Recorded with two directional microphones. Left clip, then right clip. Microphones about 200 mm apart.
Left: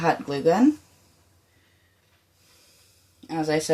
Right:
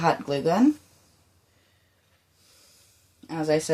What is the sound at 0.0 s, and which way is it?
Speech, 25° right (ahead or behind).